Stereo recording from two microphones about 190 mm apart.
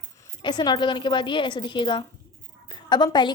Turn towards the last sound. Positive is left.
turn(degrees=20)  # may be behind; listen again after turning